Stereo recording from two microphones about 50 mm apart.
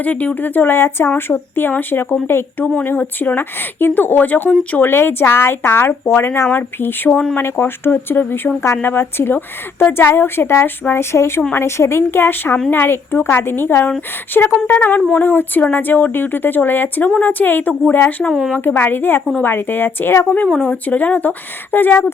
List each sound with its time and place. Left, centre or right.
0.0 s speech: left
4.8 s speech: left
11.1 s speech: left
14.3 s speech: left
20.6 s speech: left